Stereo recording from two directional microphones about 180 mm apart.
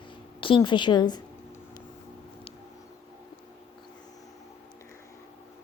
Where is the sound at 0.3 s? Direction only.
30° left (ahead or behind).